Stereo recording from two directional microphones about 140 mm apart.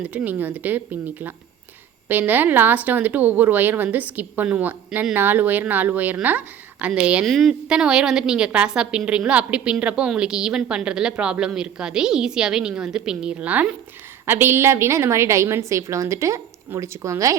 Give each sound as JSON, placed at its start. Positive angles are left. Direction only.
{"t": 0.0, "sound": "a woman's voice", "side_deg": -10}